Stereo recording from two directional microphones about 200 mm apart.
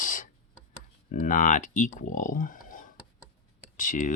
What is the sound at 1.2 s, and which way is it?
Speech, 40° left (ahead or behind).